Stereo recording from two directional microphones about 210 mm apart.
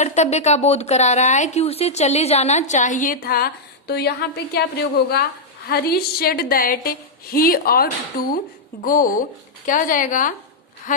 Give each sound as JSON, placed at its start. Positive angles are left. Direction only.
{"t": 0.0, "sound": "a woman's voice", "side_deg": 35}